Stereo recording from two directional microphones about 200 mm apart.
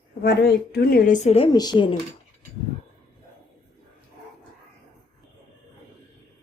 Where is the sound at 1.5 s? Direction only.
20° left (ahead or behind).